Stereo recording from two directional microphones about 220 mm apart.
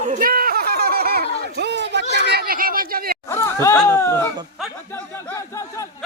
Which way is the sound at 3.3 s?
10° left (ahead or behind).